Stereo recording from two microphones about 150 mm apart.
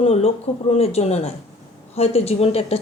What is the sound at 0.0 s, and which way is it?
Speech, 45° left (ahead or behind).